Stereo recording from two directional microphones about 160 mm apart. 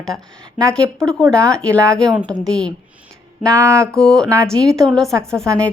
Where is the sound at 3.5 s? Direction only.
15° right (ahead or behind).